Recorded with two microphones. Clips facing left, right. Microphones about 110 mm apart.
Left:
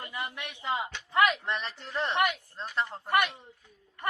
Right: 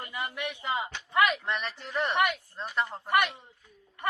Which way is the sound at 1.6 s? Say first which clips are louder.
Right 2 dB; centre (ahead or behind).